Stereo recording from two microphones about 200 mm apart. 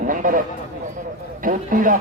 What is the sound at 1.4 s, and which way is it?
Speech, 40° right (ahead or behind).